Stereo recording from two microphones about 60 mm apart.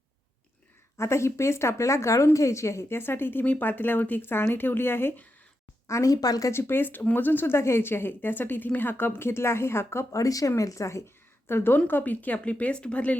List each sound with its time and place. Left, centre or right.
0.9 s a woman's voice: left
5.9 s speech: left
6.5 s a woman's voice: left
10.6 s a woman's voice: left
11.4 s a woman's voice: left
11.9 s speech: left